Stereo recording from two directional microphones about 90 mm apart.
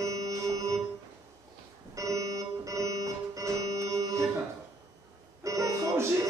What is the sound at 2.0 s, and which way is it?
Music, 40° right (ahead or behind).